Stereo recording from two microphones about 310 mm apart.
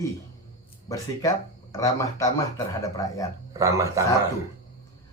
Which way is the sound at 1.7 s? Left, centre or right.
Centre.